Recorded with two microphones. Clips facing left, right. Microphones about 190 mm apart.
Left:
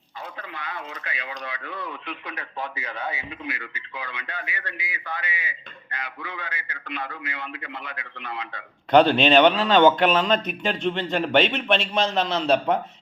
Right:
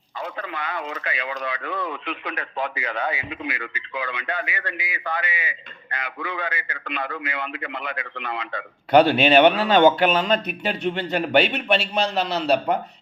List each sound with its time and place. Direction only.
0.3 s speech: 75° right (ahead or behind)
8.9 s speech: 5° right (ahead or behind)